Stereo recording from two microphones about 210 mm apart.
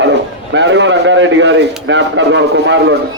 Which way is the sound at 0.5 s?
60° right (ahead or behind).